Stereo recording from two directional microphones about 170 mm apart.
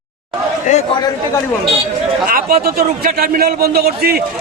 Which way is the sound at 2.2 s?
60° right (ahead or behind).